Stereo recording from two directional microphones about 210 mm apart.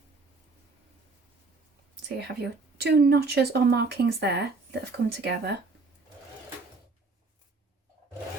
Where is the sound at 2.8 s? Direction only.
50° right (ahead or behind).